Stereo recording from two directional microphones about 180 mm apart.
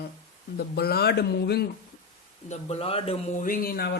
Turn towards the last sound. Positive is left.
turn(degrees=60)  # may be behind; listen again after turning